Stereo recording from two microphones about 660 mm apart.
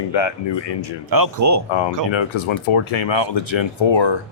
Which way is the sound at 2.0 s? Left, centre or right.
Left.